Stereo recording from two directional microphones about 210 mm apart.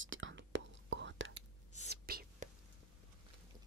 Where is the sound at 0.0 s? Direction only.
65° right (ahead or behind).